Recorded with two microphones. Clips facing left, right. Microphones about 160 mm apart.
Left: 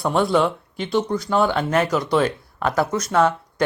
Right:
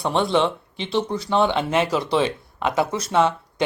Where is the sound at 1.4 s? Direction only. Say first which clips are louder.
Even; 20° right (ahead or behind).